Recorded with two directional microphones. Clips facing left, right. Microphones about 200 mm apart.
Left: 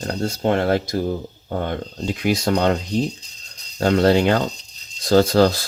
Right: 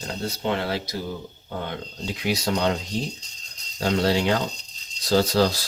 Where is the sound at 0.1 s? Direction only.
50° left (ahead or behind).